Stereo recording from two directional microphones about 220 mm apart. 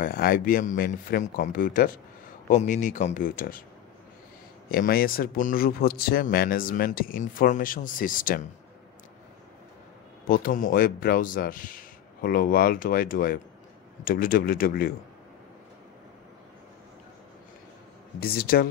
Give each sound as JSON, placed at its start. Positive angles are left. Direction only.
{"t": 0.0, "sound": "speech", "side_deg": 40}
{"t": 4.6, "sound": "speech", "side_deg": 40}
{"t": 10.2, "sound": "speech", "side_deg": 40}
{"t": 18.2, "sound": "speech", "side_deg": 45}